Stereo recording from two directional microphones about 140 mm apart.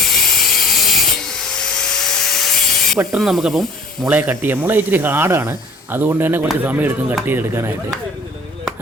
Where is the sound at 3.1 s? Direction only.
Centre (ahead or behind).